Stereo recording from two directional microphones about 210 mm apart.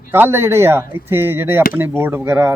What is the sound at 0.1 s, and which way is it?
Speech, 10° right (ahead or behind).